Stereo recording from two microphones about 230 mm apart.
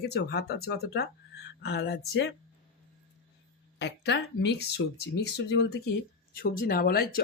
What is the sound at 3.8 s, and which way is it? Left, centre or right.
Speech, left.